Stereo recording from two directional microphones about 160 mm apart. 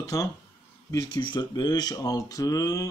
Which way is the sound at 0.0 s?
20° left (ahead or behind).